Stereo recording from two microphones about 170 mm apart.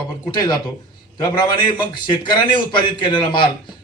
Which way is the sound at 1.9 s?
25° left (ahead or behind).